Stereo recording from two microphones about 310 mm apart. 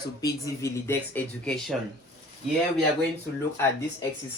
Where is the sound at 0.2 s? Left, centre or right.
Centre.